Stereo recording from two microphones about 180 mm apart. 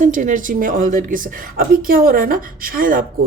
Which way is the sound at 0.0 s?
45° right (ahead or behind).